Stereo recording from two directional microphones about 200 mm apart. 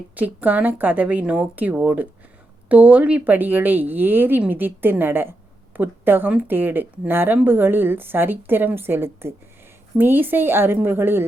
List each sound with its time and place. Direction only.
0.2 s a woman's voice: 10° right (ahead or behind)